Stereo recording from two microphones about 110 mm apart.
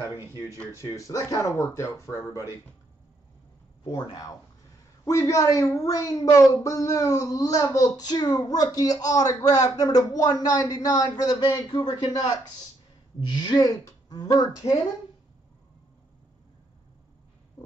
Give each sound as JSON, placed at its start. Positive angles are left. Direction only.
{"t": 0.7, "sound": "speech", "side_deg": 30}
{"t": 3.8, "sound": "speech", "side_deg": 40}